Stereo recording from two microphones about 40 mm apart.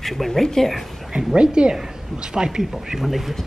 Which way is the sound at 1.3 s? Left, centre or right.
Right.